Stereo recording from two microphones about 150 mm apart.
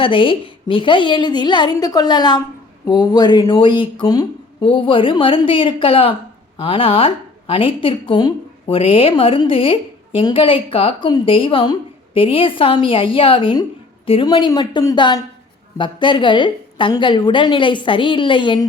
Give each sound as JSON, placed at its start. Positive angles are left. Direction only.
{"t": 0.0, "sound": "a woman's voice", "side_deg": 35}